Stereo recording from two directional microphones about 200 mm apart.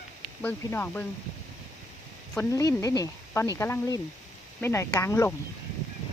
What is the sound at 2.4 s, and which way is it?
Speech, 15° left (ahead or behind).